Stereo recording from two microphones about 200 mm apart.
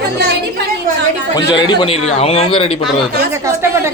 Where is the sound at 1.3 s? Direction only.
20° left (ahead or behind).